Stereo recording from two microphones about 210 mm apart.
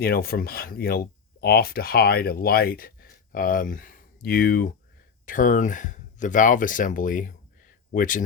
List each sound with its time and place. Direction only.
0.0 s speech: 45° left (ahead or behind)